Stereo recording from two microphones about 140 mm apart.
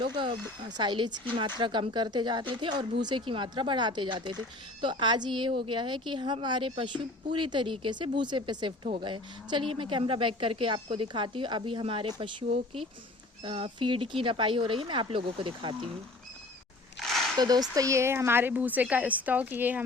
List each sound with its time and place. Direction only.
0.0 s speech: 35° right (ahead or behind)
17.0 s a sound: centre (ahead or behind)
17.3 s speech: 30° right (ahead or behind); by 19.8 s 10° right (ahead or behind)